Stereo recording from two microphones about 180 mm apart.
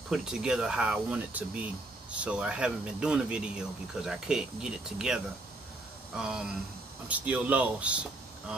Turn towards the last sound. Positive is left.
turn(degrees=-5)  # may be behind; listen again after turning